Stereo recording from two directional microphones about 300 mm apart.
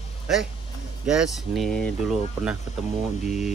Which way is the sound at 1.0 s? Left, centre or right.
Centre.